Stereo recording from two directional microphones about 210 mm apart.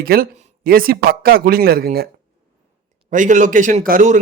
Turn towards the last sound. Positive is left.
turn(degrees=-35)  # may be behind; listen again after turning